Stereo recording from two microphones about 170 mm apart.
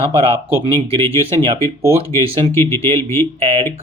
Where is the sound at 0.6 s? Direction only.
30° right (ahead or behind).